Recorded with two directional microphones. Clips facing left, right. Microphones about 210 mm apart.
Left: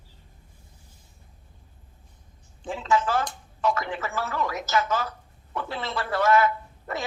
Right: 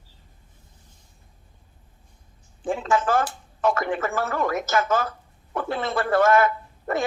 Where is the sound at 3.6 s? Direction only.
50° right (ahead or behind).